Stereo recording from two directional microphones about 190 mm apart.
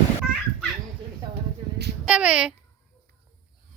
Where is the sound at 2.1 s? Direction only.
5° right (ahead or behind).